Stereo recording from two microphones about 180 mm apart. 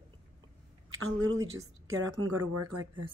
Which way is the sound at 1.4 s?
20° right (ahead or behind).